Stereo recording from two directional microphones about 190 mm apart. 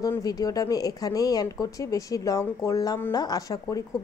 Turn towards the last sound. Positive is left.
turn(degrees=20)  # may be behind; listen again after turning